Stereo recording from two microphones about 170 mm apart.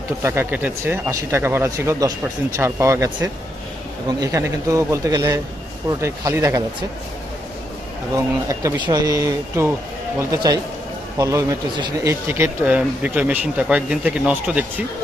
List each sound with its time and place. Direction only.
0.2 s speech: 15° right (ahead or behind)
8.1 s speech: 20° right (ahead or behind)